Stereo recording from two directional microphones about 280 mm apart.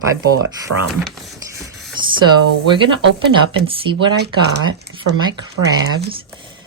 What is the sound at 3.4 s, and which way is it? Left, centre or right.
Speech, centre.